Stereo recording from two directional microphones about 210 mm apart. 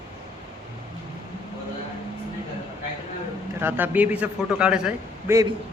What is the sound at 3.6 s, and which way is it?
A man's voice, 10° right (ahead or behind).